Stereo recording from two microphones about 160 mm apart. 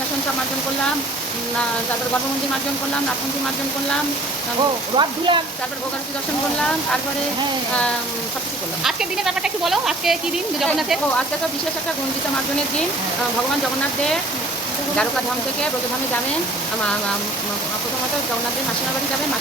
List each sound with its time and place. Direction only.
4.9 s speech: 30° right (ahead or behind)
8.8 s speech: 5° right (ahead or behind)